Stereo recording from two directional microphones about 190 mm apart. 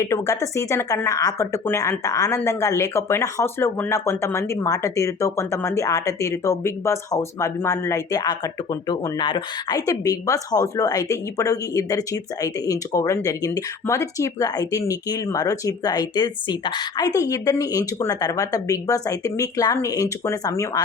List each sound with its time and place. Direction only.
0.0 s speech: 15° left (ahead or behind)